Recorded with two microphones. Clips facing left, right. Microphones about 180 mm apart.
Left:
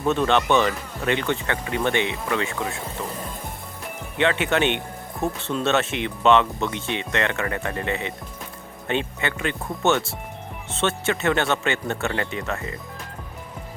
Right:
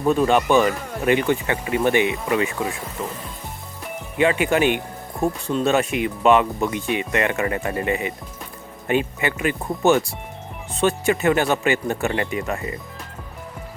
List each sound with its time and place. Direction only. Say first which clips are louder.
0.0 s speech: right 3 dB; 10° right (ahead or behind)
4.2 s speech: right 3 dB; 5° right (ahead or behind)
10.7 s speech: right 4 dB; centre (ahead or behind)